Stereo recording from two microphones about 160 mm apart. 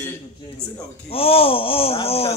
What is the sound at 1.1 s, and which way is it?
A man's voice, 35° left (ahead or behind).